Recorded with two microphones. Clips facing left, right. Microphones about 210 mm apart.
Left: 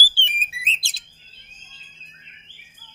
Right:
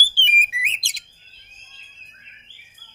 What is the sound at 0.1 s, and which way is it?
Whistle, 15° right (ahead or behind).